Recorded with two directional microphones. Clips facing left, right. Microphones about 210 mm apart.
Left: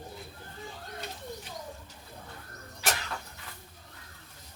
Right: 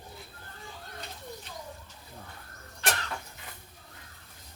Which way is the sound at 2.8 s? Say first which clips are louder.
Right 1 dB; 5° left (ahead or behind).